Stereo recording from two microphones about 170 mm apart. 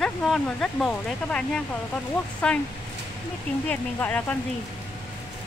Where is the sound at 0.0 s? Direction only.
5° left (ahead or behind).